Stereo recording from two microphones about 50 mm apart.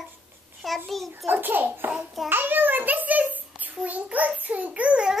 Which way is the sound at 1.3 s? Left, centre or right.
Right.